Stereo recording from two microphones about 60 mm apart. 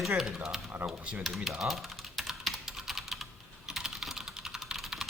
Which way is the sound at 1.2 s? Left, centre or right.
Centre.